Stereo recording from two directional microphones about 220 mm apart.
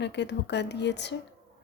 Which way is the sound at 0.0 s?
50° left (ahead or behind).